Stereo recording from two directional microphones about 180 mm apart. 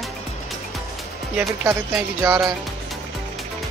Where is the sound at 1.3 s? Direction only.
10° right (ahead or behind).